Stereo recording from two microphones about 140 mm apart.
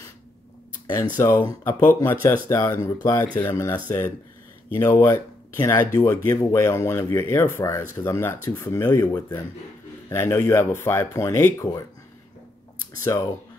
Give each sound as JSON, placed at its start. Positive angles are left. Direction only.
{"t": 1.1, "sound": "speech", "side_deg": 20}
{"t": 13.0, "sound": "speech", "side_deg": 20}